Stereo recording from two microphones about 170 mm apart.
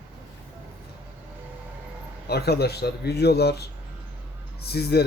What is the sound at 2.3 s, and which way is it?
Speech, 70° left (ahead or behind).